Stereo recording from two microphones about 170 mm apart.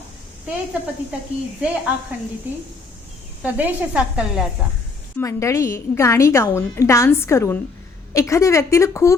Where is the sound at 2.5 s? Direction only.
10° right (ahead or behind).